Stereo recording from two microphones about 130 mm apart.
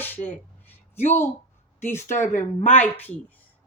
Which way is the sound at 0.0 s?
15° left (ahead or behind).